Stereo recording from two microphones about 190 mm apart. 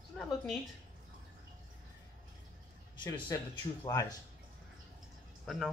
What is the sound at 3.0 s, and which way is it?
Speech, 20° left (ahead or behind).